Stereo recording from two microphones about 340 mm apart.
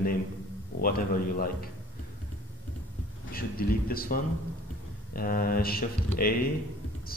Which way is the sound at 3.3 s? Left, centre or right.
Left.